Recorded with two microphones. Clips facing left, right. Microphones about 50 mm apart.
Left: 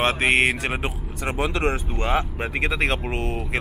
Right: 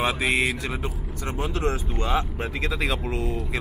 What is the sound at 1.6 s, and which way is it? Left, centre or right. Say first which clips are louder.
Speech: left 2 dB; left.